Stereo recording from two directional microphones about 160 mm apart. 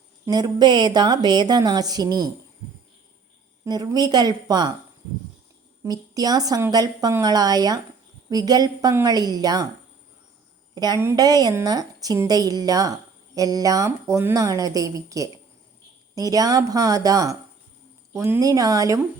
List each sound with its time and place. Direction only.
0.3 s a woman's voice: 25° right (ahead or behind)
3.6 s a woman's voice: 20° right (ahead or behind)
5.8 s a woman's voice: 25° right (ahead or behind)
10.8 s a woman's voice: 25° right (ahead or behind)